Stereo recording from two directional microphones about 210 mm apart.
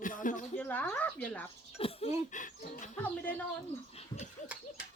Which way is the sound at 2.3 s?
40° left (ahead or behind).